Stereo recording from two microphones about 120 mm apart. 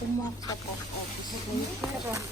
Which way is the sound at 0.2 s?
30° left (ahead or behind).